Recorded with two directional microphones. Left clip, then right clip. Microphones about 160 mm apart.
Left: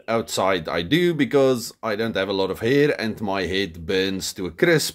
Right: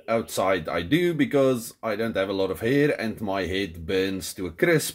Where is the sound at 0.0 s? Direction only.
25° left (ahead or behind).